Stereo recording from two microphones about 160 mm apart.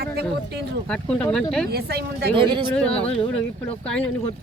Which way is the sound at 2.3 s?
30° right (ahead or behind).